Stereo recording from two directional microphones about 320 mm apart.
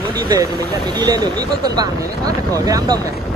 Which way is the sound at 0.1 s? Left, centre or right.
Centre.